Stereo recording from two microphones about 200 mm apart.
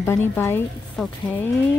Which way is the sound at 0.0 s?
15° left (ahead or behind).